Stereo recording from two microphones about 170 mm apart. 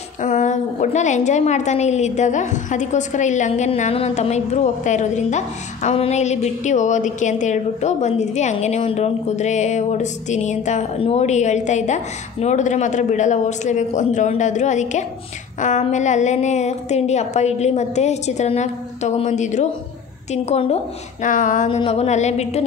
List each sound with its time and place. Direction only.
0.2 s a woman's voice: 45° left (ahead or behind)
21.6 s a woman's voice: 35° left (ahead or behind)